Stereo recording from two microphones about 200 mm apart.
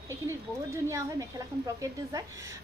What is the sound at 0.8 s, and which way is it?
A woman's voice, 15° right (ahead or behind).